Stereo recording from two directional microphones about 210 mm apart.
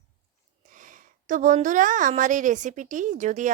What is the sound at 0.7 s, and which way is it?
A woman's voice, 40° right (ahead or behind).